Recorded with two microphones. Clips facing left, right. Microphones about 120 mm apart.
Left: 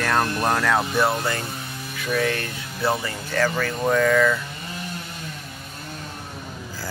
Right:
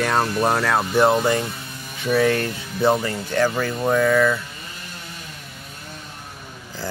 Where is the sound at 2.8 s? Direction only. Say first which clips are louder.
Right 5 dB; 15° right (ahead or behind).